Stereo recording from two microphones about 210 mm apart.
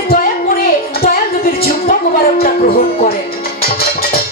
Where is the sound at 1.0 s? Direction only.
45° left (ahead or behind).